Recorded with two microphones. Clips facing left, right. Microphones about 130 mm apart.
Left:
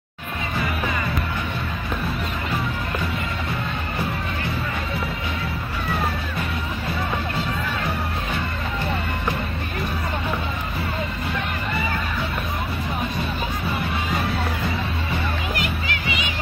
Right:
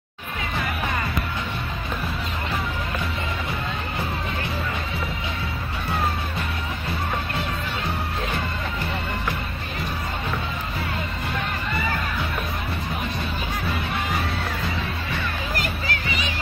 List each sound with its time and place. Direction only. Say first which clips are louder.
15.5 s music: left 1 dB; 40° right (ahead or behind)